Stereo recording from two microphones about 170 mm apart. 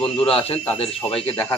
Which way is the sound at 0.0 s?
35° left (ahead or behind).